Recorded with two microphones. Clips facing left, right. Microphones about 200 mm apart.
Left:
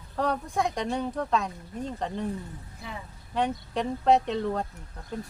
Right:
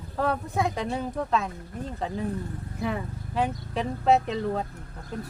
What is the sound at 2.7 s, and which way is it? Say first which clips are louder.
Speech: right 12 dB; 60° right (ahead or behind).